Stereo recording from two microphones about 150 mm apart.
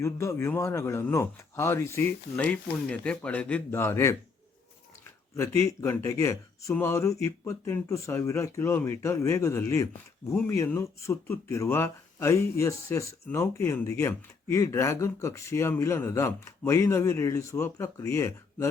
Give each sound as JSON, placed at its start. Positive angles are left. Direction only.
{"t": 0.0, "sound": "speech", "side_deg": 20}
{"t": 5.4, "sound": "speech", "side_deg": 20}